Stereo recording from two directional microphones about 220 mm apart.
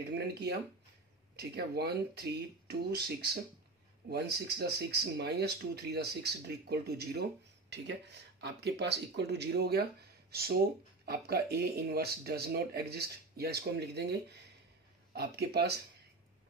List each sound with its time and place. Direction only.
0.1 s speech: 50° right (ahead or behind)
8.4 s speech: 50° right (ahead or behind)